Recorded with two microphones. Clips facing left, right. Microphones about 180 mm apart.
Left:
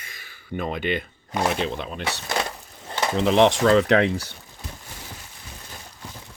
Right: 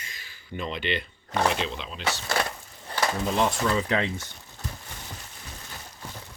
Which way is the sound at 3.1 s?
75° left (ahead or behind).